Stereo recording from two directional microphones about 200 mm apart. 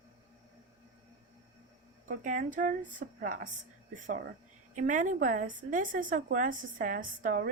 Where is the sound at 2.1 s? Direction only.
40° right (ahead or behind).